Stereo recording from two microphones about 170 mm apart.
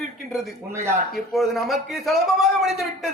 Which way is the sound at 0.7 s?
15° right (ahead or behind).